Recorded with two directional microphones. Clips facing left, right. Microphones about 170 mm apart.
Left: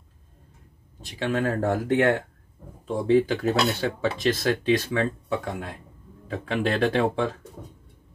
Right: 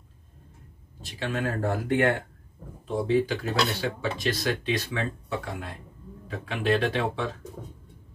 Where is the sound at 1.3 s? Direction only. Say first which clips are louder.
Left 4 dB; 50° left (ahead or behind).